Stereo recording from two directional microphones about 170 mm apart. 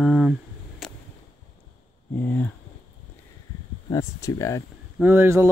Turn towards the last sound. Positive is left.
turn(degrees=-15)  # may be behind; listen again after turning